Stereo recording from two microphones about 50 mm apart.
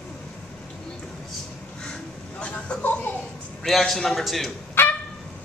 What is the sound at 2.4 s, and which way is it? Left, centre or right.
Speech, left.